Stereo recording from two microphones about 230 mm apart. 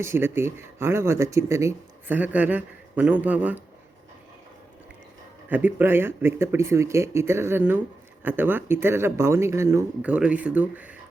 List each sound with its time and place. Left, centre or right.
0.0 s speech: centre
5.5 s speech: centre